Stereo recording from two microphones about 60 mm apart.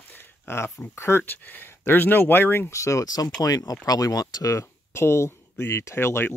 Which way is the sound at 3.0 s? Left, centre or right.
Left.